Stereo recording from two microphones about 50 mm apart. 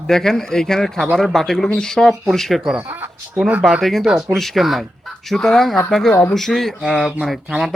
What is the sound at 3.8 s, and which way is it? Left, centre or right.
Speech, centre.